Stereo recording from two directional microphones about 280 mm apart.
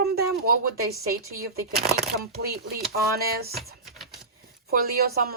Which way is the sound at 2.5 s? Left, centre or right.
Right.